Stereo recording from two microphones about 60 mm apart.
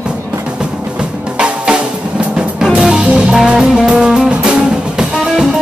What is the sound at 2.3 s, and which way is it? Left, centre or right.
Music, centre.